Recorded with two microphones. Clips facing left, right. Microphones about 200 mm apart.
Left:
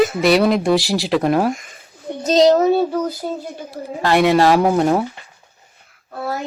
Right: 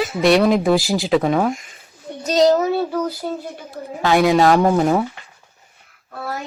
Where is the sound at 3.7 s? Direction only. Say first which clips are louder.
Even; centre (ahead or behind).